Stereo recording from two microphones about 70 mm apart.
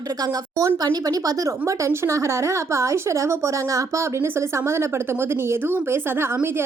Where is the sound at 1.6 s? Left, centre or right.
Right.